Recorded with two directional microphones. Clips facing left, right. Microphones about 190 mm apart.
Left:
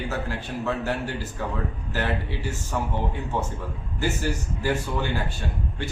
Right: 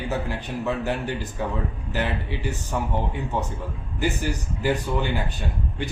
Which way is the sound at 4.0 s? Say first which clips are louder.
Right 1 dB; 15° right (ahead or behind).